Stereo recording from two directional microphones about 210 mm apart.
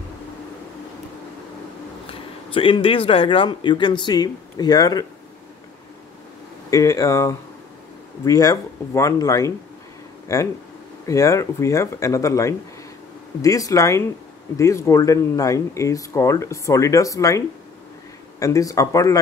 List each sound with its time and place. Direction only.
2.5 s speech: 25° left (ahead or behind)
6.7 s speech: 15° left (ahead or behind)
18.4 s speech: 15° left (ahead or behind)